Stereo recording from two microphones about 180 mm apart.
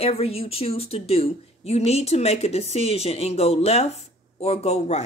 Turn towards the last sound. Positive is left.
turn(degrees=35)  # may be behind; listen again after turning